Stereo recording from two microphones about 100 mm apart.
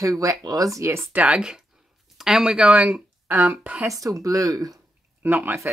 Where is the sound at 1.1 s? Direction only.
10° right (ahead or behind).